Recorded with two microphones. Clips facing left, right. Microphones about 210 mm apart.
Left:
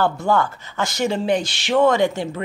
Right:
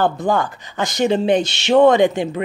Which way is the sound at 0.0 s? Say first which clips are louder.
Right 1 dB; 15° right (ahead or behind).